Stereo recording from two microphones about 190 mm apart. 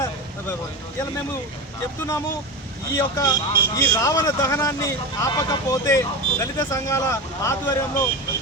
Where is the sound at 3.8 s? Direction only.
15° left (ahead or behind).